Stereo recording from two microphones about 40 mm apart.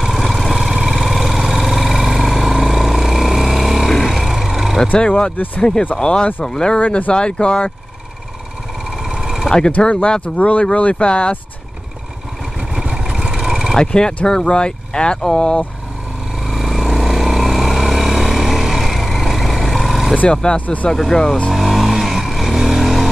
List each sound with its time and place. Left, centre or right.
0.0 s vehicle: centre
4.1 s a sound: centre
4.9 s speech: left
6.8 s speech: left
9.2 s a sound: centre
9.7 s speech: left
12.9 s vehicle: centre
13.7 s speech: centre
16.4 s vehicle: centre
20.5 s speech: left
21.1 s speech: centre
21.5 s vehicle: centre